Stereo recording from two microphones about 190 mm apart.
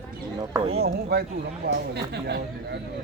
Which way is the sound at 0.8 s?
55° right (ahead or behind).